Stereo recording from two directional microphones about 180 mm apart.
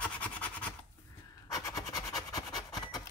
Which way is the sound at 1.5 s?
20° left (ahead or behind).